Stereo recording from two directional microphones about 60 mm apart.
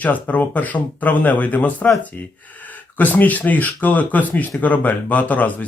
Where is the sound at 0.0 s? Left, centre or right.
Left.